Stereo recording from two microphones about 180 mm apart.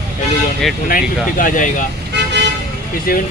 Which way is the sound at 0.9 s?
50° left (ahead or behind).